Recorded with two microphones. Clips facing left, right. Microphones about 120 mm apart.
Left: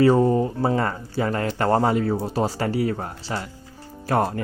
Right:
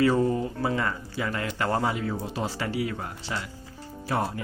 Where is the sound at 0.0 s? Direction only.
35° left (ahead or behind).